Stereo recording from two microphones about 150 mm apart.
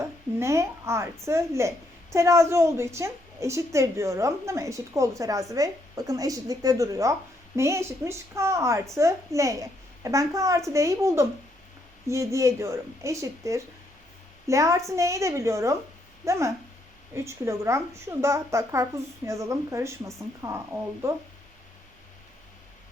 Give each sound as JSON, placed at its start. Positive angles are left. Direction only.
{"t": 0.0, "sound": "a woman's voice", "side_deg": -20}